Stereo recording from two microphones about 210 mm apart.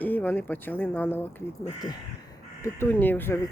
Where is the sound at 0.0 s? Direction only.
10° left (ahead or behind).